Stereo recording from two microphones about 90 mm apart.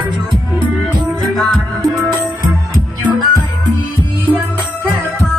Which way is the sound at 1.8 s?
50° right (ahead or behind).